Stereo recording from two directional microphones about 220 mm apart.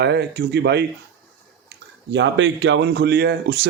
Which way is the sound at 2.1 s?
55° right (ahead or behind).